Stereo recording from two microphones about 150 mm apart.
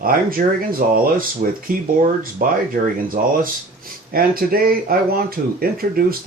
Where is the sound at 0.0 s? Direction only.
75° right (ahead or behind).